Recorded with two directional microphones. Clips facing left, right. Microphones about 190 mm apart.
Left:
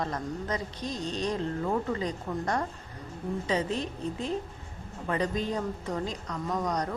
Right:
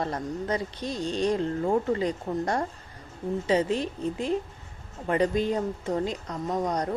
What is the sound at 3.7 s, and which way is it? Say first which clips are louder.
Speech: right 4 dB; centre (ahead or behind).